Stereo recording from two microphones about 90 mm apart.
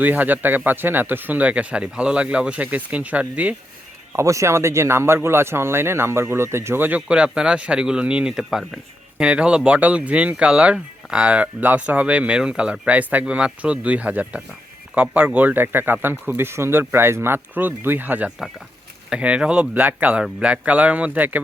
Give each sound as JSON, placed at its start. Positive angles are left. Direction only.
{"t": 0.0, "sound": "speech", "side_deg": -20}
{"t": 4.1, "sound": "speech", "side_deg": -35}
{"t": 7.1, "sound": "speech", "side_deg": -10}
{"t": 18.3, "sound": "speech", "side_deg": -5}